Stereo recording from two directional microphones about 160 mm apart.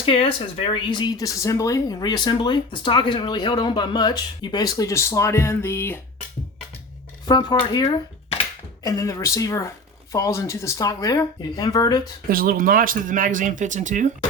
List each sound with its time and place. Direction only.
0.0 s speech: 35° left (ahead or behind); by 6.0 s 15° left (ahead or behind)
7.3 s speech: 25° left (ahead or behind)
12.3 s speech: 65° right (ahead or behind); by 14.1 s 50° right (ahead or behind)